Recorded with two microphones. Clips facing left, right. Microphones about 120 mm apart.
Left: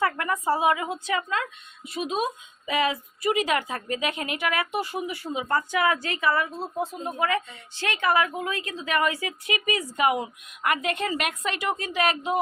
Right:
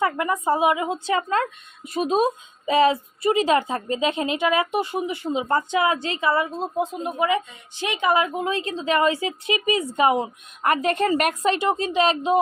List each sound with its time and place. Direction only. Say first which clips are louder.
0.0 s speech: right 3 dB; 20° right (ahead or behind); by 11.5 s 40° right (ahead or behind)
11.5 s speech: right 6 dB; 25° right (ahead or behind)